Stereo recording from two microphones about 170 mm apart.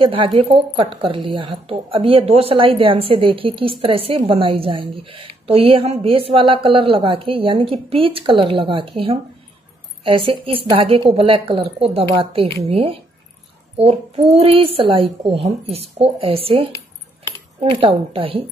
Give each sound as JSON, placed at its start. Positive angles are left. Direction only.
{"t": 0.0, "sound": "a woman's voice", "side_deg": -30}
{"t": 10.0, "sound": "a woman's voice", "side_deg": -30}